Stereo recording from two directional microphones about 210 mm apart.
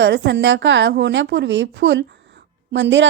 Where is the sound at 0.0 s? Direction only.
55° right (ahead or behind).